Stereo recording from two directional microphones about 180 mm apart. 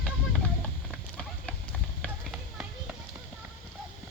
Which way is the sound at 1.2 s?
5° left (ahead or behind).